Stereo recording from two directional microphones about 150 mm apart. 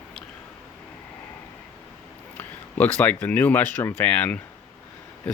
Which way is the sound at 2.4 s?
15° left (ahead or behind).